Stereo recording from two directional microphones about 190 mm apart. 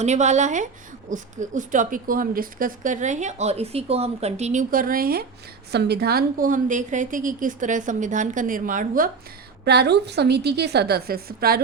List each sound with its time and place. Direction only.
0.0 s a woman's voice: 35° right (ahead or behind)
9.6 s a woman's voice: 60° right (ahead or behind)